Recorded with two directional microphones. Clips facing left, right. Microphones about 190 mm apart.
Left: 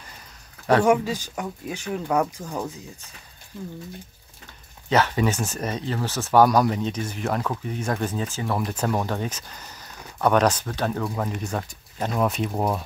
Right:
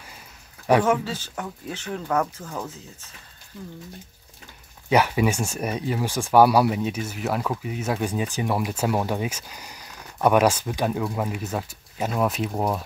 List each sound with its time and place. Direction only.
0.8 s speech: 15° left (ahead or behind)
4.8 s speech: 10° right (ahead or behind)